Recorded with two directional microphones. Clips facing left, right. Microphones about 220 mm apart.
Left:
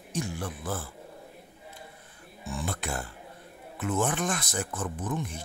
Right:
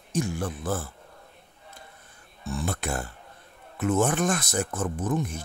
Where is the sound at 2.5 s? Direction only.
45° right (ahead or behind).